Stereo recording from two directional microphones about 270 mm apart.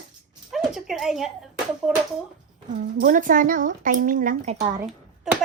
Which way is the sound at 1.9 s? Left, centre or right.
Centre.